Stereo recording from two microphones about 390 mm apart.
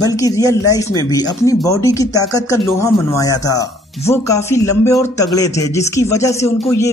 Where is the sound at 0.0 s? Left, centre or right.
Centre.